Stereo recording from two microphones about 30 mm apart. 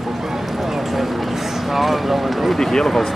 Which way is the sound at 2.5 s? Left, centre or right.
Centre.